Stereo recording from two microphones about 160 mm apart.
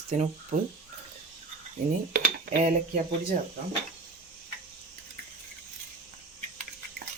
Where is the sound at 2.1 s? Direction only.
55° right (ahead or behind).